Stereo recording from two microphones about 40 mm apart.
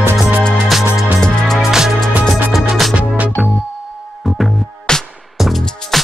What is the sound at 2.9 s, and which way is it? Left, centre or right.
Music, right.